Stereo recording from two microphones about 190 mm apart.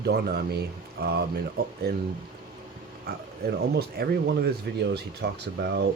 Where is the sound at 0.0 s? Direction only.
60° right (ahead or behind).